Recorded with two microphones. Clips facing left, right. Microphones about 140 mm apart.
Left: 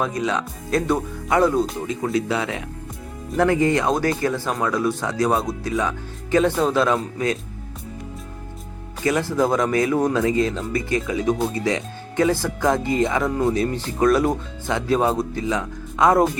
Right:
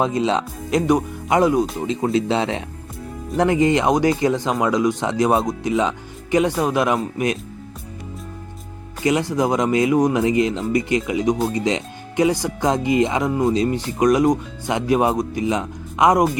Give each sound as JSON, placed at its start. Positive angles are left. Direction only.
{"t": 0.0, "sound": "speech", "side_deg": -25}
{"t": 9.0, "sound": "speech", "side_deg": -20}